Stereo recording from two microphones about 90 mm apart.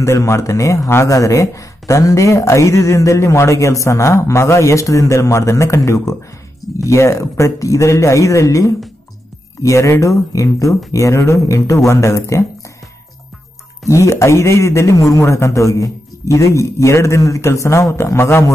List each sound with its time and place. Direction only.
0.0 s speech: 35° left (ahead or behind)
13.8 s a man's voice: 35° left (ahead or behind)